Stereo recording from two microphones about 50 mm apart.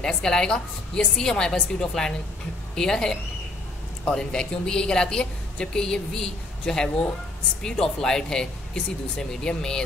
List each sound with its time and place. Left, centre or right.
0.0 s a woman's voice: centre